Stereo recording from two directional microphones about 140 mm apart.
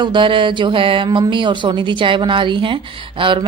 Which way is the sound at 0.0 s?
35° right (ahead or behind).